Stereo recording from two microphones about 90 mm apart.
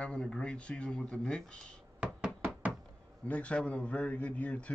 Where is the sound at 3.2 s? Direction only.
15° left (ahead or behind).